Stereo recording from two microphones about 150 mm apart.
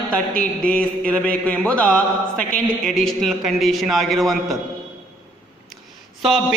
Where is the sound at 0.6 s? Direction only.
5° left (ahead or behind).